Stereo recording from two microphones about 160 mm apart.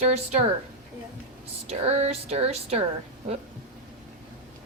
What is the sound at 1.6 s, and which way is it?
Speech, 40° right (ahead or behind).